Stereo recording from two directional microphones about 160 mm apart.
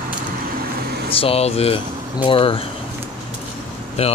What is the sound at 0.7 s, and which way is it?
Vehicle, 80° right.